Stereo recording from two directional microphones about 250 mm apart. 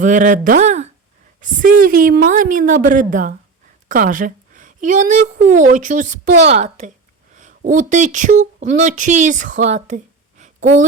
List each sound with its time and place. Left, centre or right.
0.0 s a woman's voice: right